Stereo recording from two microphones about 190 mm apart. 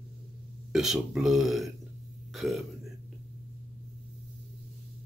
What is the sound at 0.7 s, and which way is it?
Speech, centre (ahead or behind).